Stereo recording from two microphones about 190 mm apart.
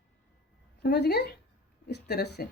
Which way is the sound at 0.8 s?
60° left (ahead or behind).